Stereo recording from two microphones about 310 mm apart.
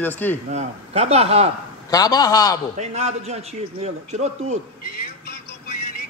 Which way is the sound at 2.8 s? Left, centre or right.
Right.